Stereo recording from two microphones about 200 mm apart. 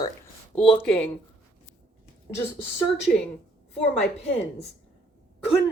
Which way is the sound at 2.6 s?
Centre (ahead or behind).